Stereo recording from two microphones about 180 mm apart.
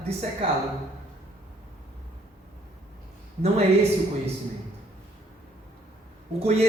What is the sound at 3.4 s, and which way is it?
Speech, 35° right (ahead or behind).